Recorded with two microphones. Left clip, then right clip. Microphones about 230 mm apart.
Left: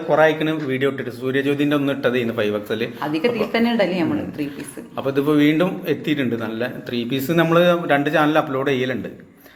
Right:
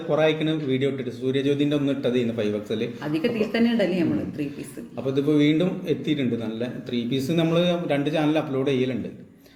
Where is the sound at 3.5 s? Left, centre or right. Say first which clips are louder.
Left 4 dB; centre.